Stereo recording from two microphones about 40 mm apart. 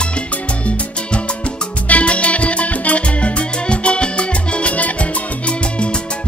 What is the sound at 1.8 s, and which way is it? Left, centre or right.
Music, left.